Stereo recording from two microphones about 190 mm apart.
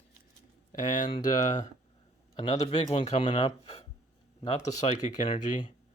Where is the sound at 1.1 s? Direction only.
20° left (ahead or behind).